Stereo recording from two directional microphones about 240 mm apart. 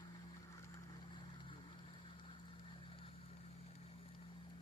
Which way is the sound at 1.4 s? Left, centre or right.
Left.